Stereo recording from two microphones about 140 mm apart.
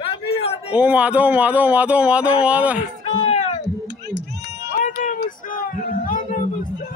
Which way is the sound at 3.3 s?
55° left (ahead or behind).